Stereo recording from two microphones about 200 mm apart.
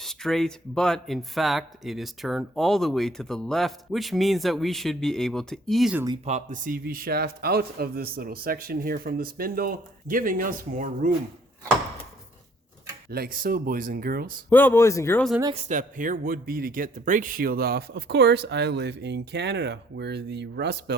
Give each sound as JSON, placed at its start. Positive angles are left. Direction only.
{"t": 0.0, "sound": "speech", "side_deg": 0}
{"t": 6.2, "sound": "a man's voice", "side_deg": -35}
{"t": 13.1, "sound": "a man's voice", "side_deg": -50}
{"t": 14.5, "sound": "speech", "side_deg": 10}
{"t": 15.5, "sound": "speech", "side_deg": -35}